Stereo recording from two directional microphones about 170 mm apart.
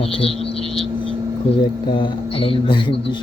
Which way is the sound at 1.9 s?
30° left (ahead or behind).